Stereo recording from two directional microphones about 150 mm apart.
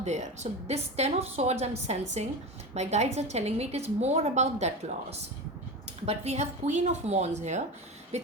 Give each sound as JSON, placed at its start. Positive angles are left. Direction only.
{"t": 0.0, "sound": "a woman's voice", "side_deg": -50}
{"t": 6.1, "sound": "a woman's voice", "side_deg": -45}